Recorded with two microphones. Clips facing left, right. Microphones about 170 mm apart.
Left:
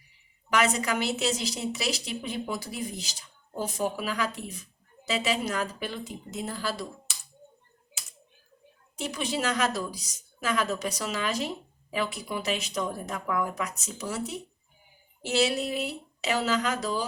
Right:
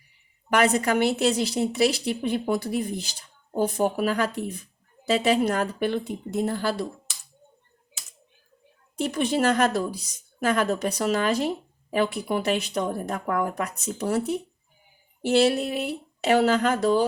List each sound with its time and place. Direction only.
0.5 s a woman's voice: 55° right (ahead or behind)
9.0 s a woman's voice: 55° right (ahead or behind)